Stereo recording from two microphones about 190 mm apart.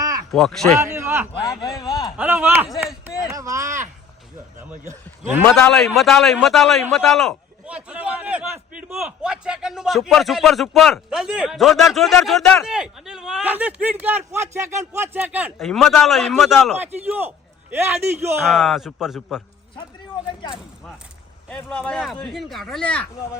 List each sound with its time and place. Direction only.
0.3 s a man's voice: centre (ahead or behind)
0.8 s a man's voice: 15° right (ahead or behind)
1.5 s a man's voice: centre (ahead or behind)
3.2 s speech: 15° right (ahead or behind)
5.5 s a man's voice: 5° left (ahead or behind); by 18.3 s 15° right (ahead or behind)
18.4 s a man's voice: centre (ahead or behind)
21.5 s a man's voice: 5° left (ahead or behind)